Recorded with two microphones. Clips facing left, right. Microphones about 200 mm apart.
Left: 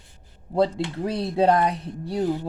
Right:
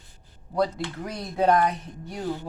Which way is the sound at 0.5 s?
25° left (ahead or behind).